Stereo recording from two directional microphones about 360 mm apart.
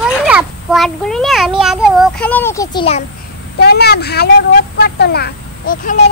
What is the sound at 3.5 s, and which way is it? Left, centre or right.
Speech, left.